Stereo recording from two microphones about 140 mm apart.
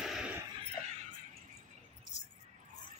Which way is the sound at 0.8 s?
55° right (ahead or behind).